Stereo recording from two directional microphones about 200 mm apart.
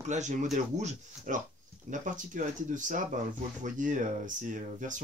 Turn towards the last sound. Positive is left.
turn(degrees=-40)  # may be behind; listen again after turning